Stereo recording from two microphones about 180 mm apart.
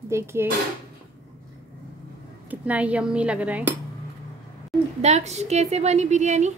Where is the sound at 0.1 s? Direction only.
15° right (ahead or behind).